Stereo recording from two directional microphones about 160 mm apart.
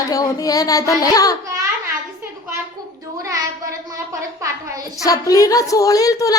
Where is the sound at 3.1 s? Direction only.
20° right (ahead or behind).